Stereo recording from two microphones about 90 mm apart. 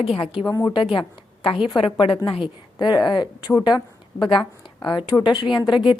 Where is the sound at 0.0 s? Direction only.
85° left.